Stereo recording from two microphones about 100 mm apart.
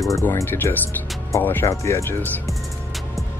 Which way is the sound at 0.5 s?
20° left (ahead or behind).